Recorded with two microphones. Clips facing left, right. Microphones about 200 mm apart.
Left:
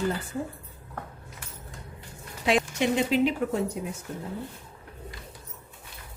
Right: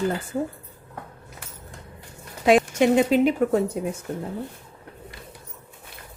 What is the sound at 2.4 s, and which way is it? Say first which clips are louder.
Speech: right 7 dB; 50° right (ahead or behind).